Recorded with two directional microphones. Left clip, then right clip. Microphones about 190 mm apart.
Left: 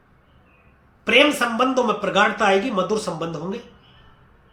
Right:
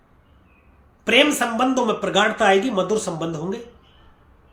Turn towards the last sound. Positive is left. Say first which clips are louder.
# right 1 dB
turn(degrees=-15)  # may be behind; listen again after turning